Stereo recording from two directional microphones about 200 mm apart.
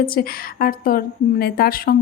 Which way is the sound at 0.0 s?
45° left (ahead or behind).